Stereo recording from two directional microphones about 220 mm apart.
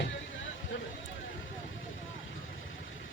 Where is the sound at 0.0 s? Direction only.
60° left (ahead or behind).